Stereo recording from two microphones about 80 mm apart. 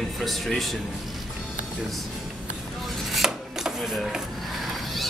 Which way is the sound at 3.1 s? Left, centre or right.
Centre.